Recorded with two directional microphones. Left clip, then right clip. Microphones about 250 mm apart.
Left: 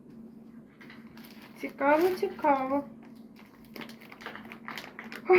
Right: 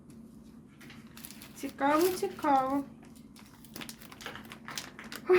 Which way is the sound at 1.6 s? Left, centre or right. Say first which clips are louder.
Left 2 dB; right.